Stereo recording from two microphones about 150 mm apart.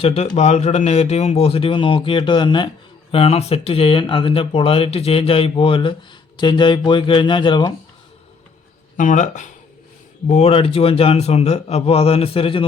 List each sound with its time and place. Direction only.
0.0 s speech: 45° left (ahead or behind)
9.0 s speech: 55° left (ahead or behind); by 12.6 s 35° left (ahead or behind)